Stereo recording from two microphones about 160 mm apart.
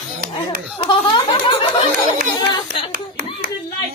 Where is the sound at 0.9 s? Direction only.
30° left (ahead or behind).